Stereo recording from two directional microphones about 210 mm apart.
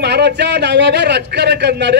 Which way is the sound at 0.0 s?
55° right (ahead or behind).